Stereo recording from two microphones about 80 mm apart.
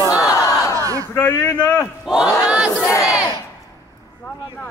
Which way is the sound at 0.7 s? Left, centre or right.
Right.